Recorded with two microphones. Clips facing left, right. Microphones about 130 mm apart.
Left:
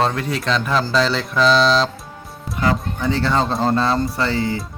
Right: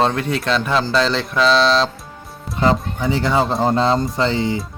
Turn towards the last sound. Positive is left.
turn(degrees=-20)  # may be behind; listen again after turning